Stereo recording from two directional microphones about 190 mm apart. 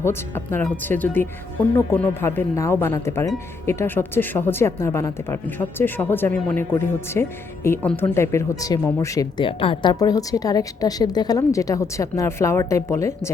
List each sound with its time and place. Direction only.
0.0 s speech: 10° left (ahead or behind)
9.5 s speech: 30° left (ahead or behind)